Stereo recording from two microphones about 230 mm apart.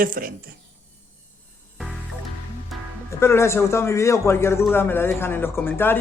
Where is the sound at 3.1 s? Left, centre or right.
Centre.